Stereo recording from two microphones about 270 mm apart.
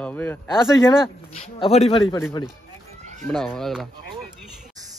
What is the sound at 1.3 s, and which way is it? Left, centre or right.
Speech, left.